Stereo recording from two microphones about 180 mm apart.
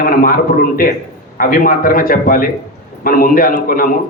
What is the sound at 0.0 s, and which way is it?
Speech, 50° left (ahead or behind).